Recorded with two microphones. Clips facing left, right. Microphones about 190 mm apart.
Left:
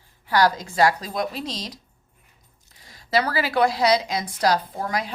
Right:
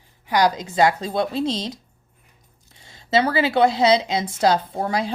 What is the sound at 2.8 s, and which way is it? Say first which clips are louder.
Speech: right 3 dB; 25° right (ahead or behind).